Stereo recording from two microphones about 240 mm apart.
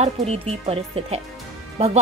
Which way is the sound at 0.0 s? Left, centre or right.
Right.